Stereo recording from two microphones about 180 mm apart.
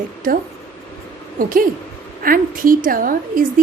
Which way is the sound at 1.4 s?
50° right (ahead or behind).